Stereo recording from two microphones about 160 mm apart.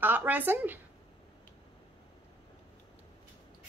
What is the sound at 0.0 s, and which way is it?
Speech, 10° right (ahead or behind).